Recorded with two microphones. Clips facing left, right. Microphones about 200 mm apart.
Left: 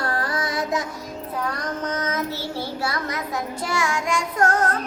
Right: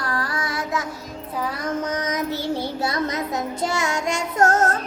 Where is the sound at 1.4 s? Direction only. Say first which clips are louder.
Right 3 dB; 5° right (ahead or behind); by 4.2 s 20° right (ahead or behind).